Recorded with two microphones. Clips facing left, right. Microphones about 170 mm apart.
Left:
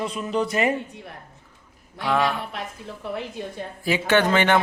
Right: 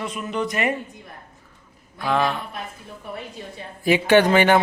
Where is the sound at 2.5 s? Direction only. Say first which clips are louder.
Left 1 dB; 75° left (ahead or behind).